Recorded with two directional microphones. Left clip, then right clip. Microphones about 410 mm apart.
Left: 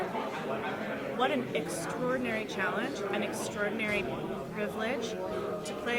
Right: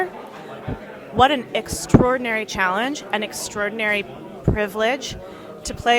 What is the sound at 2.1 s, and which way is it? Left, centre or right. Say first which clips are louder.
A woman's voice: right 11 dB; right.